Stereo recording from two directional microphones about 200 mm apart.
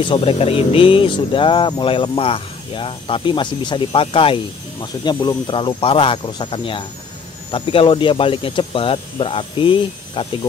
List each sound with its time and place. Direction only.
0.0 s speech: 25° left (ahead or behind)